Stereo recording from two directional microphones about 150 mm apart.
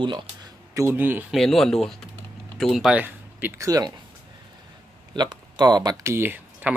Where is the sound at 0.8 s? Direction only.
15° right (ahead or behind).